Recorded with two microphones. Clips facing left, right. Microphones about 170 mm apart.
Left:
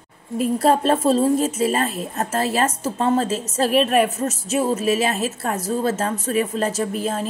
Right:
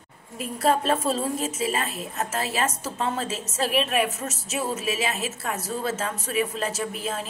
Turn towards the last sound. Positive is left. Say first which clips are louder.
# left 6 dB
turn(degrees=35)  # may be behind; listen again after turning